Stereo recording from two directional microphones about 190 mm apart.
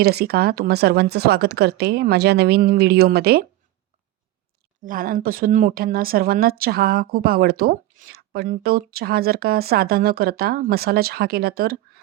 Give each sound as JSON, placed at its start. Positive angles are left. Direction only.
{"t": 0.0, "sound": "speech", "side_deg": -55}
{"t": 4.8, "sound": "speech", "side_deg": -45}